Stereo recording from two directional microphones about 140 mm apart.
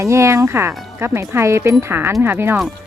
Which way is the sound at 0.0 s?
20° right (ahead or behind).